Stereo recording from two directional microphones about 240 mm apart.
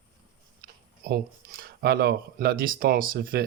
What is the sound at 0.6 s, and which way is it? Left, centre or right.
Speech, right.